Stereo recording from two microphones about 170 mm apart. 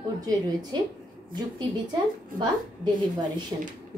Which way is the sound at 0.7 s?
25° right (ahead or behind).